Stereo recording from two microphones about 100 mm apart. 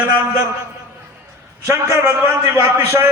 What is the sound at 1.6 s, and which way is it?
A man's voice, 30° right (ahead or behind).